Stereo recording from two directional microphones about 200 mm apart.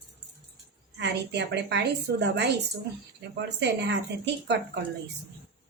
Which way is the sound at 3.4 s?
60° right (ahead or behind).